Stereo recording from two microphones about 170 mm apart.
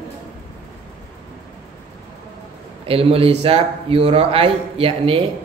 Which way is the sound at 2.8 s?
35° right (ahead or behind).